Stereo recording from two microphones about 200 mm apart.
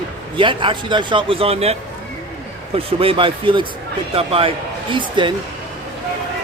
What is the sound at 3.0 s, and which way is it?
A man's voice, 25° right (ahead or behind).